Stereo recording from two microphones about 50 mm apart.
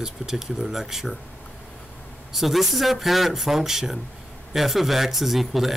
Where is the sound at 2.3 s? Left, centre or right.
Centre.